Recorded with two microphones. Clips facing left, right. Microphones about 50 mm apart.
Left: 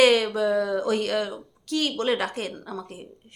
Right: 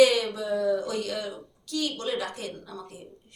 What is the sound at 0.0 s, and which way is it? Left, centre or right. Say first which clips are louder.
Speech: left 2 dB; left.